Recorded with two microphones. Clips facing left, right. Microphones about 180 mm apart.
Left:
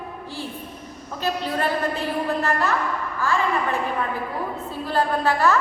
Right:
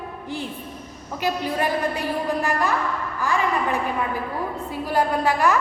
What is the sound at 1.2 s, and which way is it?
Speech, 15° right (ahead or behind).